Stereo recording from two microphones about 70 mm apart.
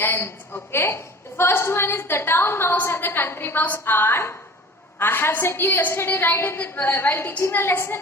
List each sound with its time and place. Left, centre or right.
0.0 s a woman's voice: left